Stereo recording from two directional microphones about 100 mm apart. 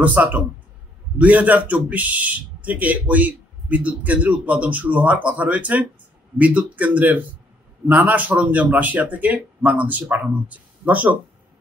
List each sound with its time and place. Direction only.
0.0 s a man's voice: 15° right (ahead or behind)